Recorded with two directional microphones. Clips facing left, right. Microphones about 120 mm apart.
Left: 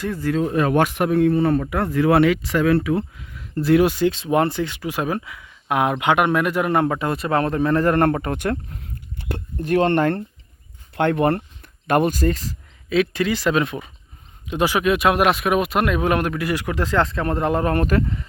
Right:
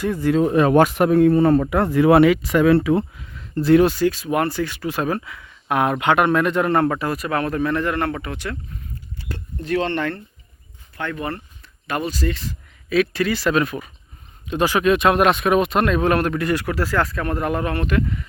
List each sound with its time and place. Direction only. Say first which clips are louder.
0.0 s speech: right 3 dB; 15° right (ahead or behind)
0.4 s speech: right 4 dB; 30° right (ahead or behind)
1.7 s speech: right 3 dB; 25° right (ahead or behind)
2.2 s speech: right 3 dB; 10° right (ahead or behind)
2.6 s speech: right 3 dB; 25° right (ahead or behind)
3.2 s a sound: right 1 dB; centre (ahead or behind)
3.8 s speech: even; 20° left (ahead or behind)
7.1 s speech: left 2 dB; 30° left (ahead or behind)
12.9 s speech: even; 20° left (ahead or behind); by 18.3 s 35° left (ahead or behind)